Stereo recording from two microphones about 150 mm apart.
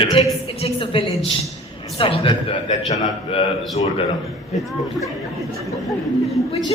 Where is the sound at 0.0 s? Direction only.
35° left (ahead or behind).